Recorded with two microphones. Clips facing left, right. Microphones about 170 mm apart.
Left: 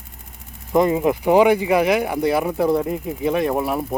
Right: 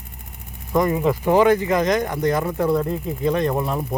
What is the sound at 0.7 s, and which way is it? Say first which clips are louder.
Speech: left 2 dB; 20° left (ahead or behind).